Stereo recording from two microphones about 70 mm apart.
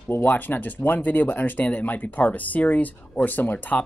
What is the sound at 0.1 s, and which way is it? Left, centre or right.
Speech, left.